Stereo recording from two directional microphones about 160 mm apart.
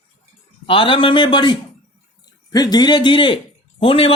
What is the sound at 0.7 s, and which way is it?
A man's voice, 35° left (ahead or behind).